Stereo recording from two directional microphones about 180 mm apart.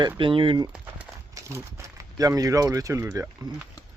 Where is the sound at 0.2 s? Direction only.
30° right (ahead or behind).